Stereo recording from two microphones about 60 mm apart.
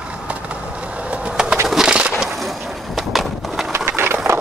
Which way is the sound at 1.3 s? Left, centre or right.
Centre.